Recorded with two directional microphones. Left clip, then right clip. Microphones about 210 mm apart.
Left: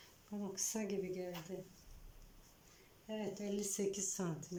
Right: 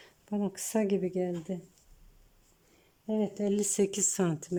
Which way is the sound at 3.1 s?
40° right (ahead or behind).